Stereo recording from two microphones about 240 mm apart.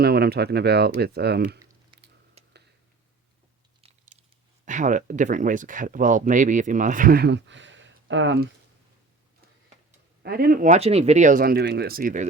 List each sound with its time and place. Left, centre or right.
0.0 s speech: right
2.4 s a sound: right
4.6 s speech: right
10.2 s speech: right